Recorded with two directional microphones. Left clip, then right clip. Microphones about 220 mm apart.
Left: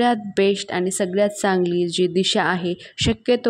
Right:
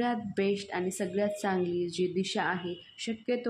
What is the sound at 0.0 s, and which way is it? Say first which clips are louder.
A woman's voice: left 12 dB; 40° left (ahead or behind).